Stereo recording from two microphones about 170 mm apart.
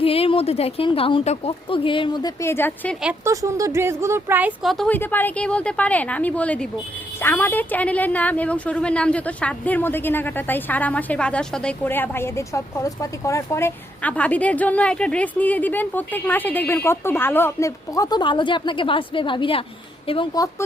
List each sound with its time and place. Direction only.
0.0 s a woman's voice: 35° left (ahead or behind); by 3.0 s 10° left (ahead or behind)
3.0 s a woman's voice: 10° right (ahead or behind)
4.9 s a woman's voice: 10° left (ahead or behind); by 20.4 s 30° left (ahead or behind)